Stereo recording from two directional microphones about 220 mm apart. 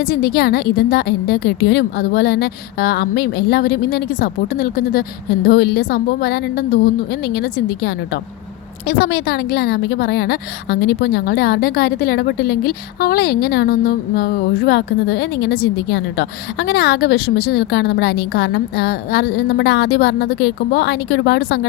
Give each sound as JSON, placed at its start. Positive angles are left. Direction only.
{"t": 0.0, "sound": "a woman's voice", "side_deg": 45}